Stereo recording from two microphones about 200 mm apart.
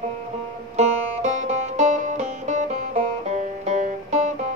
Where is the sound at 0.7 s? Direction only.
35° right (ahead or behind).